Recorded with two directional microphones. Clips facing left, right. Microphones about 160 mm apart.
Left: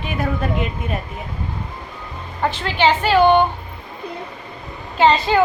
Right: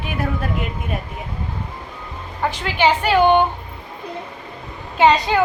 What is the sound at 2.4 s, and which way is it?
Speech, 15° right (ahead or behind).